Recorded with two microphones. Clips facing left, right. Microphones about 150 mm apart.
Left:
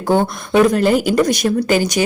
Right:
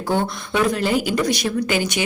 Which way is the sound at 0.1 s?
50° left (ahead or behind).